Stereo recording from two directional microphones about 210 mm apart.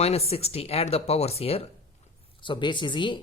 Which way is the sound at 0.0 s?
30° left (ahead or behind).